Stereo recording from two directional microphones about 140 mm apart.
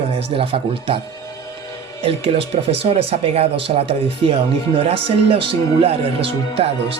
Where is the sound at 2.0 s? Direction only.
40° right (ahead or behind).